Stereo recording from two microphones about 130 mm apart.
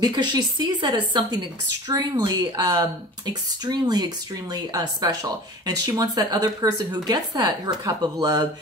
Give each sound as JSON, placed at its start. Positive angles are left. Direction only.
{"t": 0.0, "sound": "speech", "side_deg": -35}